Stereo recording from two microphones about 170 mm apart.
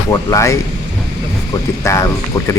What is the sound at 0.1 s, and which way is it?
Speech, 20° left (ahead or behind).